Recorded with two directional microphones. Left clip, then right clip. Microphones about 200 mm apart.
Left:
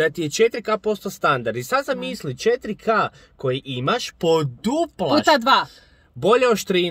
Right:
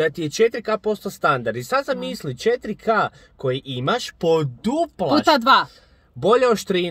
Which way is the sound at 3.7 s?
10° left (ahead or behind).